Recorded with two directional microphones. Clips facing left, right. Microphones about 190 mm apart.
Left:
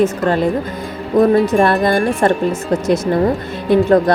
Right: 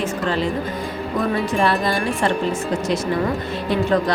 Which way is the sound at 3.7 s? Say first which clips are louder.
Left 8 dB; 50° left (ahead or behind).